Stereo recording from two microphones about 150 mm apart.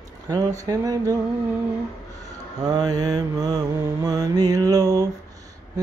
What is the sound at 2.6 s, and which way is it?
Mantra, 25° right (ahead or behind).